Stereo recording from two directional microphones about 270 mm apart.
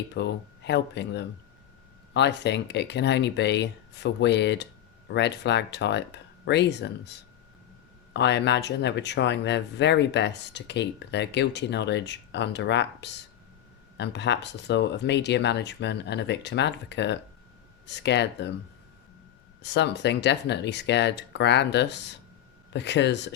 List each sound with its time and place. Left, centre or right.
0.1 s speech: left
19.6 s speech: left